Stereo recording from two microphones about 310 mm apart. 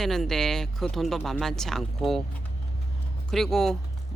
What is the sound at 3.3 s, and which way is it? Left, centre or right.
Speech, centre.